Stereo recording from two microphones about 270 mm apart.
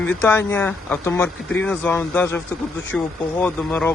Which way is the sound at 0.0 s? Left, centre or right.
Centre.